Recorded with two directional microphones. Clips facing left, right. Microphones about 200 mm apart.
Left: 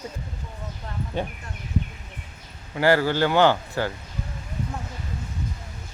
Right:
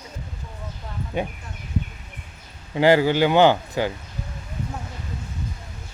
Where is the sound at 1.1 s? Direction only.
15° right (ahead or behind).